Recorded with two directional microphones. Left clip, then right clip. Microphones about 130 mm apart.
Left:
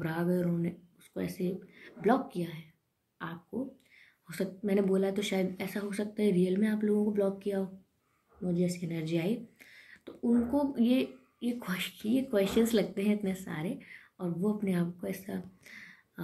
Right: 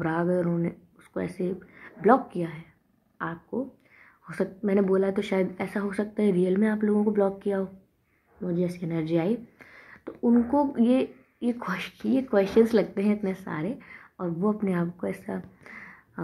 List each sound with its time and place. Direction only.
0.1 s speech: 30° right (ahead or behind); by 2.6 s 50° right (ahead or behind)
4.4 s speech: 45° right (ahead or behind)